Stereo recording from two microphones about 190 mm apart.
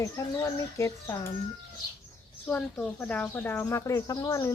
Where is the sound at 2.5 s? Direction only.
10° left (ahead or behind).